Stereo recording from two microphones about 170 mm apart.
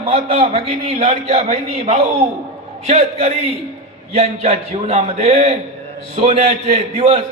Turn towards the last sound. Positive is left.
turn(degrees=-35)  # may be behind; listen again after turning